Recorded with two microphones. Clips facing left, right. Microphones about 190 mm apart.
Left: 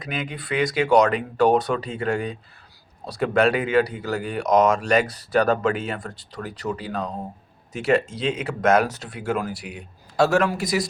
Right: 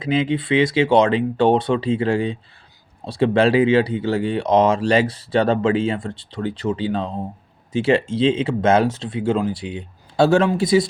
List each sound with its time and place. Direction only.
0.0 s speech: 30° right (ahead or behind)